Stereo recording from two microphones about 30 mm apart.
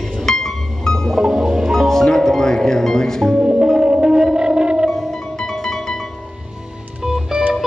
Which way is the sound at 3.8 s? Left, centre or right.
Right.